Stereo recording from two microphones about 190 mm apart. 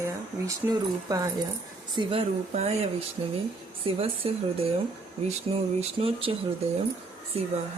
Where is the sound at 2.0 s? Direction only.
30° right (ahead or behind).